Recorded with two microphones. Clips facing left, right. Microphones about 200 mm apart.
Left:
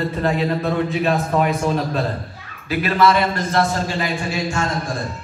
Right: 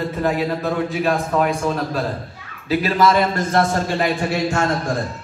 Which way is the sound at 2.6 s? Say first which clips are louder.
Even; 35° right (ahead or behind).